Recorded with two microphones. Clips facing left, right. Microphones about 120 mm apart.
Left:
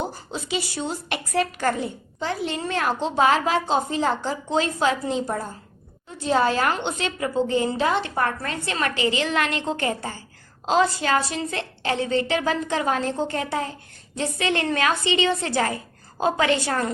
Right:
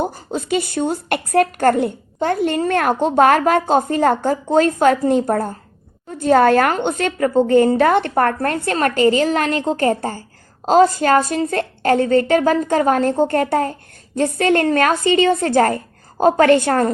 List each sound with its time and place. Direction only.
0.0 s a woman's voice: 50° right (ahead or behind)